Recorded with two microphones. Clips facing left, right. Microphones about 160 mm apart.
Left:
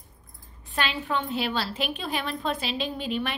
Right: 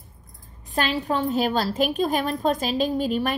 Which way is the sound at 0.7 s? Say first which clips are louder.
Right 5 dB; 40° right (ahead or behind).